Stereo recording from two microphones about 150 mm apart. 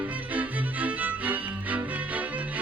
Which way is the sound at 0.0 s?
10° right (ahead or behind).